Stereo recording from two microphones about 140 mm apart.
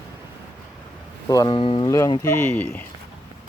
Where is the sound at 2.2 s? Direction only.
15° left (ahead or behind).